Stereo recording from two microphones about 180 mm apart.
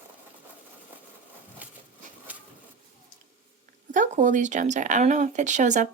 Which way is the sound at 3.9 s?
45° right (ahead or behind).